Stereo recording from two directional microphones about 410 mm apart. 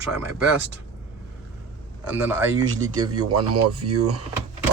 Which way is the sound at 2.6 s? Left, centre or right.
Right.